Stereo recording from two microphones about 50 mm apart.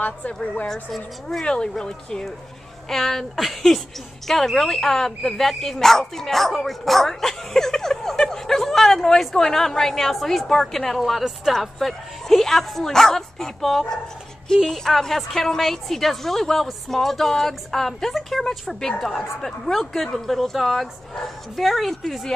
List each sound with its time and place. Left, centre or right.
0.0 s a woman's voice: left
1.4 s a woman's voice: centre